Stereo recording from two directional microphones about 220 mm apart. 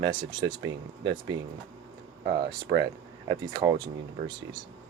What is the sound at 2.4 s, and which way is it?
Speech, 20° right (ahead or behind).